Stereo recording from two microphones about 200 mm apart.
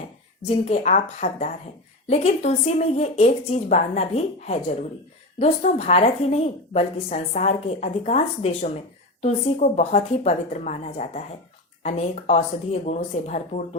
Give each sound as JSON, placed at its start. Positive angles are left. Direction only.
{"t": 0.4, "sound": "a woman's voice", "side_deg": 35}